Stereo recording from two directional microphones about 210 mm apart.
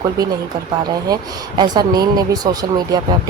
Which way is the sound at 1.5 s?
20° right (ahead or behind).